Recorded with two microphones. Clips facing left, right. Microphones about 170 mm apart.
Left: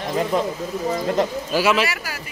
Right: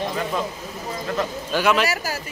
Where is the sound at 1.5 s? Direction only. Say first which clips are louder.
Left 1 dB; 5° left (ahead or behind).